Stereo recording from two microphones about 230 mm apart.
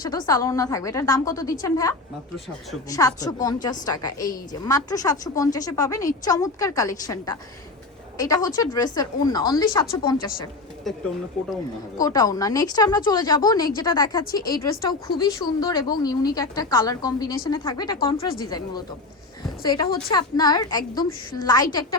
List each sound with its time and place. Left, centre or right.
0.0 s a woman's voice: centre
3.2 s a woman's voice: centre
10.9 s speech: centre
11.9 s a woman's voice: centre